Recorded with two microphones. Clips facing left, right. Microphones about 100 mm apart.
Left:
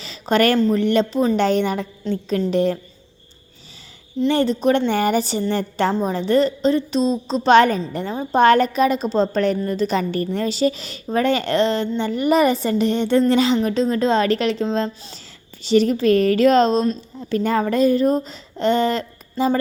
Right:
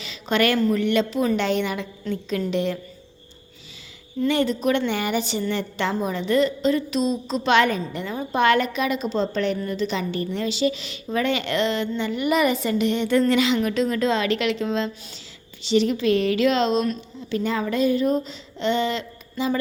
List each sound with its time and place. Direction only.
0.0 s a sound: 35° left (ahead or behind)
0.6 s a woman's voice: 35° left (ahead or behind)
4.3 s a woman's voice: 35° left (ahead or behind)